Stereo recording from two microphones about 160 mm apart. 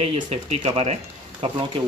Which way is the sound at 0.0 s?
40° right (ahead or behind).